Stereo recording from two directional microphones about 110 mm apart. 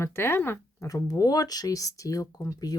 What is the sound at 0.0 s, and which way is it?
Speech, 20° left (ahead or behind).